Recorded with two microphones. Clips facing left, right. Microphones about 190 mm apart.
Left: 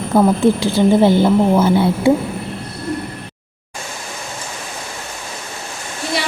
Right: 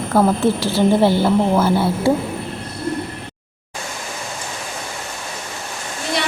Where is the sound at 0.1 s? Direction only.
15° left (ahead or behind).